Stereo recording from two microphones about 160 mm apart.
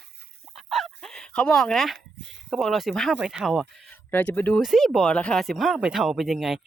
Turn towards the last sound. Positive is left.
turn(degrees=0)  # may be behind; listen again after turning